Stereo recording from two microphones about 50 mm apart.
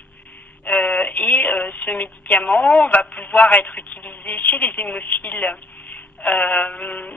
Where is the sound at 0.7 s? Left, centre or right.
Left.